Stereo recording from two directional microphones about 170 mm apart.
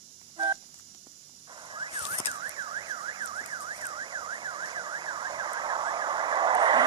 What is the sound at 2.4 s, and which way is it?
Car alarm, 30° right (ahead or behind).